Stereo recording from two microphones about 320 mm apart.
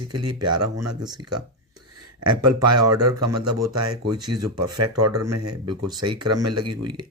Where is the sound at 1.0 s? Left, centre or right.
Centre.